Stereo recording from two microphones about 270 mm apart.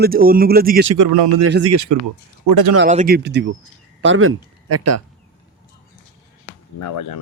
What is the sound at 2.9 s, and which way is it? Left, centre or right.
Speech, right.